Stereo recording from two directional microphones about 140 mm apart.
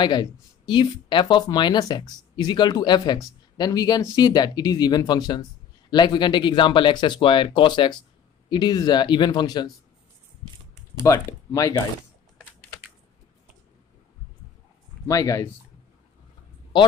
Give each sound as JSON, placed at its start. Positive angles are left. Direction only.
{"t": 0.0, "sound": "speech", "side_deg": 30}
{"t": 11.0, "sound": "speech", "side_deg": 25}
{"t": 15.0, "sound": "speech", "side_deg": 25}